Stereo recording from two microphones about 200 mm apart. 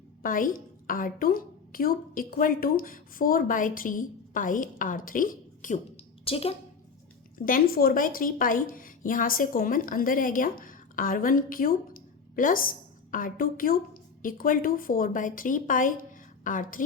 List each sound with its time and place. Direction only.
0.2 s a woman's voice: 45° left (ahead or behind)
6.2 s speech: 30° left (ahead or behind)
7.3 s a woman's voice: 45° left (ahead or behind)